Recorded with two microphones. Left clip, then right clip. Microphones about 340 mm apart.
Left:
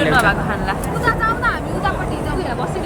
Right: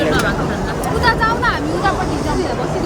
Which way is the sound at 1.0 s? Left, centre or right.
Centre.